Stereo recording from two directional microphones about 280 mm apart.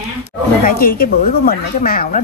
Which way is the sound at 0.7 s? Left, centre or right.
Left.